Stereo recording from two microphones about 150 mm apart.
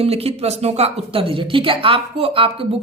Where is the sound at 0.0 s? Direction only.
40° right (ahead or behind).